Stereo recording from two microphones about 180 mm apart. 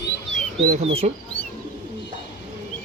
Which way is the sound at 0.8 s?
35° right (ahead or behind).